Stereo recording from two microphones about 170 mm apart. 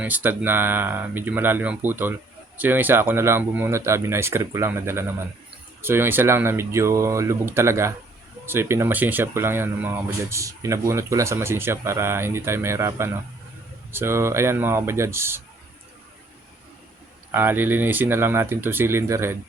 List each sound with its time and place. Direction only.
0.0 s speech: 10° right (ahead or behind)
17.3 s speech: 10° right (ahead or behind)